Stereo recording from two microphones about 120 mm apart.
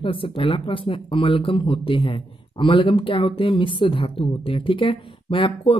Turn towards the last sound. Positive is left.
turn(degrees=45)  # may be behind; listen again after turning